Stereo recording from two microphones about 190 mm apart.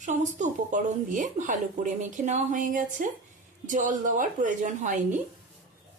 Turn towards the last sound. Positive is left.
turn(degrees=-40)  # may be behind; listen again after turning